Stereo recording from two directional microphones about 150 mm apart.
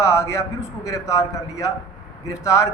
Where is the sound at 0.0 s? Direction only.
20° left (ahead or behind).